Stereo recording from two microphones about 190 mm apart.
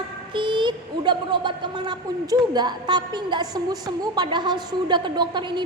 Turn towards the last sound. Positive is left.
turn(degrees=-25)  # may be behind; listen again after turning